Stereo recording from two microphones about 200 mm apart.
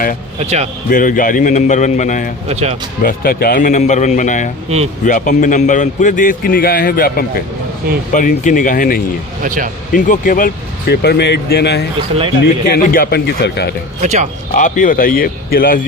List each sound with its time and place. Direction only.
0.3 s speech: 35° right (ahead or behind)
0.9 s a man's voice: 40° left (ahead or behind)
2.5 s speech: 30° right (ahead or behind)
3.0 s a man's voice: 50° left (ahead or behind)
9.4 s speech: 40° right (ahead or behind)
9.9 s speech: 40° left (ahead or behind)
14.0 s speech: 35° right (ahead or behind)
14.5 s speech: 40° left (ahead or behind)